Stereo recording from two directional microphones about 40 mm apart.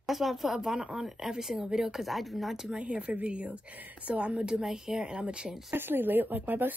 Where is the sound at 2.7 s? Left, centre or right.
Right.